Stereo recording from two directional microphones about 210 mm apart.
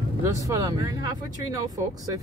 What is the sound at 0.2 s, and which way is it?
Speech, 15° right (ahead or behind).